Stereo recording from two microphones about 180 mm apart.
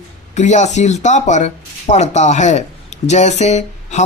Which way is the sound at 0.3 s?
40° left (ahead or behind).